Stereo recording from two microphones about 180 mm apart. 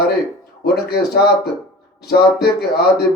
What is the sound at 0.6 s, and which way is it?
A man's voice, 60° left (ahead or behind).